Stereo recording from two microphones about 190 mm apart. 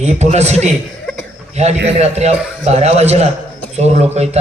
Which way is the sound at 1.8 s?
35° right (ahead or behind).